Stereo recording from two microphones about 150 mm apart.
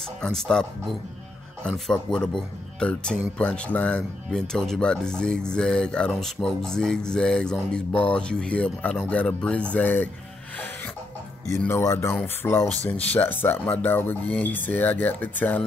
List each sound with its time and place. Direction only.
0.2 s speech: 5° left (ahead or behind)
11.5 s speech: 15° left (ahead or behind)